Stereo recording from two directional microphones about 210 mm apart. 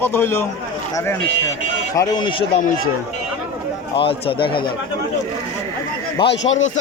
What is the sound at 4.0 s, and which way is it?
Speech, 25° left (ahead or behind).